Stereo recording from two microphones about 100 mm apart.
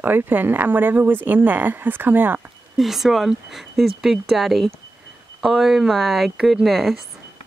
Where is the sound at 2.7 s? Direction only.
5° right (ahead or behind).